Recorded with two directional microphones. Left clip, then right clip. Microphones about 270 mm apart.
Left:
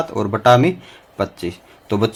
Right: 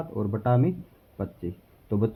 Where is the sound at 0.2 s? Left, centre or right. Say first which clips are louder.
Left 14 dB; left.